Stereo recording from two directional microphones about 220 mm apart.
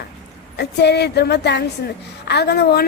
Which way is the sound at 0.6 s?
50° left (ahead or behind).